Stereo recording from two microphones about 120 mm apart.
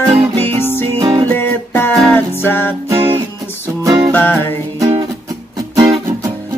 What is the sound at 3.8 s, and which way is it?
Music, 35° right (ahead or behind).